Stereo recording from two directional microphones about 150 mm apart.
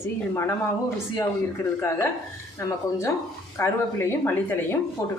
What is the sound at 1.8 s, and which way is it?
Speech, 20° left (ahead or behind).